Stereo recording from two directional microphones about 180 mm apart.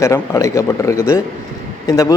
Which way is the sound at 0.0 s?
15° left (ahead or behind).